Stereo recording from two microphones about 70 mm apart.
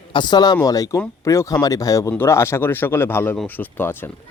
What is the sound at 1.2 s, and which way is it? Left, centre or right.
Speech, left.